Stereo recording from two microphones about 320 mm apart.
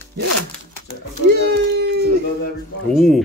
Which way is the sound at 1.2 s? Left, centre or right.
Right.